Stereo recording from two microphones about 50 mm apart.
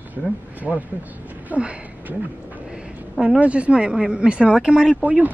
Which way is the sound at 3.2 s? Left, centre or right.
Right.